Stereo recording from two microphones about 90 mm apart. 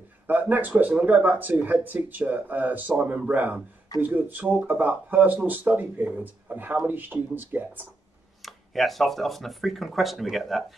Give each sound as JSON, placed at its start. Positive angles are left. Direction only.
{"t": 0.3, "sound": "speech", "side_deg": -20}
{"t": 8.4, "sound": "speech", "side_deg": 0}